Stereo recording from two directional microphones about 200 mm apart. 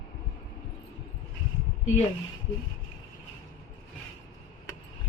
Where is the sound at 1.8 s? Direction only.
35° left (ahead or behind).